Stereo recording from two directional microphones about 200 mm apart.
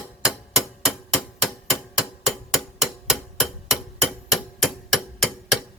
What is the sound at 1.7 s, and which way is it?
Hammer, centre (ahead or behind).